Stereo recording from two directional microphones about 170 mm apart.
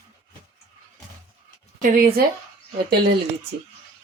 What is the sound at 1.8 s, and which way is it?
Speech, 55° right (ahead or behind).